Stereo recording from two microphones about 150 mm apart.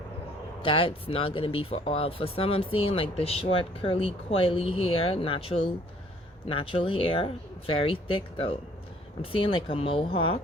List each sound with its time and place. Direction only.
0.6 s speech: 35° left (ahead or behind)